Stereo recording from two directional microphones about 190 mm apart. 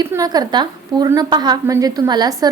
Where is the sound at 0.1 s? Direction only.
20° right (ahead or behind).